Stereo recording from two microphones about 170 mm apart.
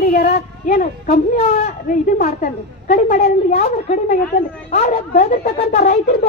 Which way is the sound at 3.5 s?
45° left (ahead or behind).